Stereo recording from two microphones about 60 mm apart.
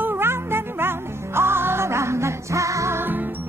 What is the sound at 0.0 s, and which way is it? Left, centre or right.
Music, right.